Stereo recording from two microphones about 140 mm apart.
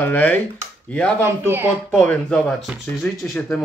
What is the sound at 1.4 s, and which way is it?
Speech, 15° right (ahead or behind).